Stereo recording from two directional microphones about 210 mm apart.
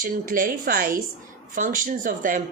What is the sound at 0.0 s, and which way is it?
A woman's voice, 40° right (ahead or behind).